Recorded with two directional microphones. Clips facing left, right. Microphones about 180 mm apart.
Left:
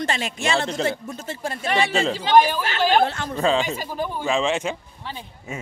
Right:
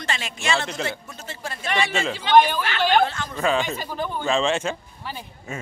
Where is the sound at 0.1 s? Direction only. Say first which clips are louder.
Right 2 dB; 40° left (ahead or behind).